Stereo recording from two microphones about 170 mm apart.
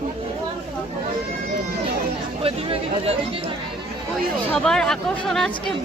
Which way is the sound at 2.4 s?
35° right (ahead or behind).